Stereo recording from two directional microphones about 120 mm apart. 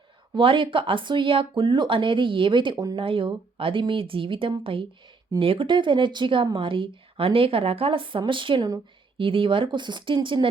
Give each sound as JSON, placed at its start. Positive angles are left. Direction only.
{"t": 0.3, "sound": "speech", "side_deg": -45}